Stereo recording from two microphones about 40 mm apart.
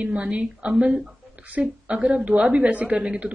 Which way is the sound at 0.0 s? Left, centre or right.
Right.